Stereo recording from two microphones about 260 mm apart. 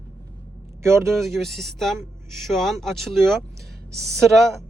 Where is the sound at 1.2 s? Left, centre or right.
Centre.